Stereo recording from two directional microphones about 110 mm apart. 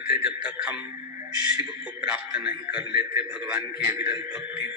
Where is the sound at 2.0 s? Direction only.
10° right (ahead or behind).